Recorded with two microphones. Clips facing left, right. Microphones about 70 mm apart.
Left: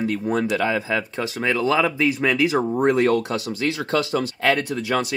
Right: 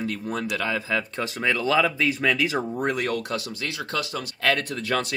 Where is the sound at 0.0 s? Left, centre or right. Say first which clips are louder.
Left 6 dB; left.